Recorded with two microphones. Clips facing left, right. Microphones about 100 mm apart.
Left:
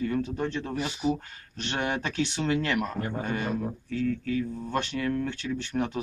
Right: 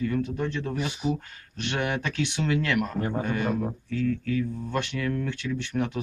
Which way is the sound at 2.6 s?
10° left (ahead or behind).